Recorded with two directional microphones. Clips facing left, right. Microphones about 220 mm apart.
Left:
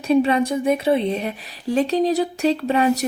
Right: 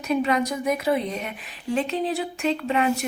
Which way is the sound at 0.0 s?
30° left (ahead or behind).